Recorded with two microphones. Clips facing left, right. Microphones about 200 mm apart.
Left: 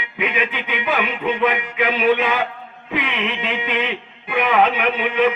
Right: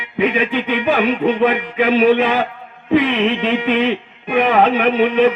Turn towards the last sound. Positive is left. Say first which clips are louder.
# right 5 dB
turn(degrees=-45)  # may be behind; listen again after turning